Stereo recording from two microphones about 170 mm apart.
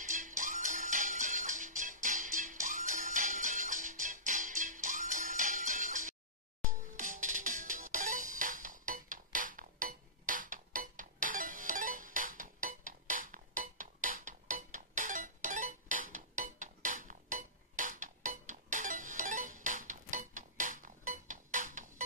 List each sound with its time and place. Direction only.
0.1 s music: 50° right (ahead or behind)